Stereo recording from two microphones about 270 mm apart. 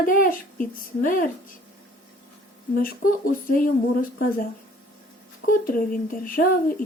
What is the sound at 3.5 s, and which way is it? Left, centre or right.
Speech, left.